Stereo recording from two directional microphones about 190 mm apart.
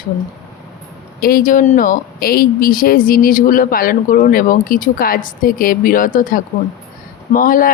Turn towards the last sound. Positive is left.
turn(degrees=45)  # may be behind; listen again after turning